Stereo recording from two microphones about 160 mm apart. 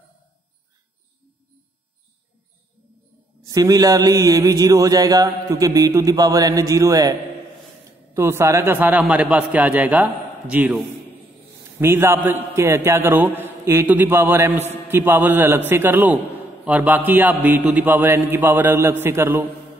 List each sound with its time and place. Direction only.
3.4 s mantra: 25° right (ahead or behind)
8.1 s a man's voice: 15° right (ahead or behind)
11.8 s a man's voice: 15° right (ahead or behind)